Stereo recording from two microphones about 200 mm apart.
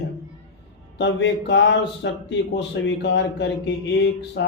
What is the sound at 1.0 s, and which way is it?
Speech, 60° left (ahead or behind).